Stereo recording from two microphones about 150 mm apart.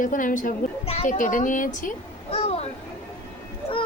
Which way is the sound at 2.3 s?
40° left (ahead or behind).